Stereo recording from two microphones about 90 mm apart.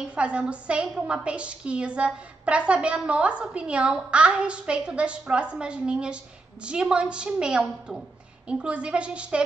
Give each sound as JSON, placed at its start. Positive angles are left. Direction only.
{"t": 0.0, "sound": "a woman's voice", "side_deg": -15}